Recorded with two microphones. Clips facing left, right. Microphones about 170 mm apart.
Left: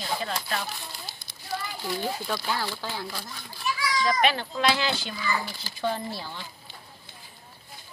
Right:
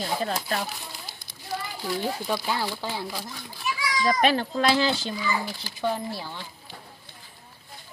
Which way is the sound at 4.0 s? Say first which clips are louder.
Right 3 dB; 40° right (ahead or behind).